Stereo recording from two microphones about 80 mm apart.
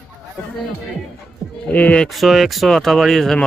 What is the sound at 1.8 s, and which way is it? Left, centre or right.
Speech, centre.